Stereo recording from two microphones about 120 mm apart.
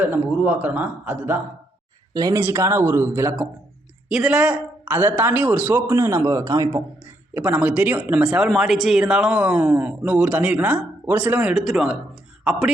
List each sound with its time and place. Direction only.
0.0 s speech: 15° right (ahead or behind)
2.1 s speech: 30° right (ahead or behind)
4.1 s speech: 5° right (ahead or behind)
5.7 s speech: 25° right (ahead or behind)
7.3 s speech: 15° right (ahead or behind)